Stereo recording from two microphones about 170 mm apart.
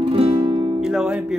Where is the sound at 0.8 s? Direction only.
5° right (ahead or behind).